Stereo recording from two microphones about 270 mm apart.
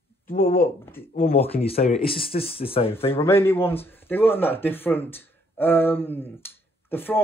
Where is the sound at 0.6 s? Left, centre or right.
Centre.